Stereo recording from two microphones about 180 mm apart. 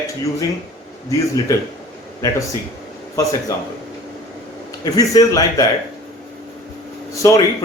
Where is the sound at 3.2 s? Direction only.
20° left (ahead or behind).